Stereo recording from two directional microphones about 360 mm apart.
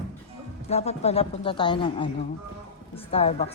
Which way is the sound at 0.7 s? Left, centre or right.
Centre.